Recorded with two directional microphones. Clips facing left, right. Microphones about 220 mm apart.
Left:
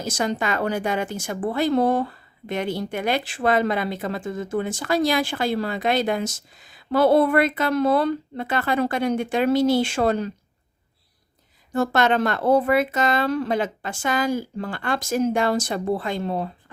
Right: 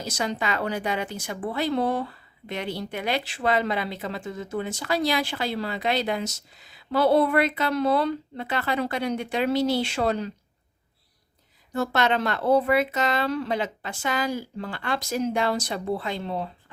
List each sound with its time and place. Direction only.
0.0 s a woman's voice: 50° left (ahead or behind)
11.7 s a woman's voice: 50° left (ahead or behind)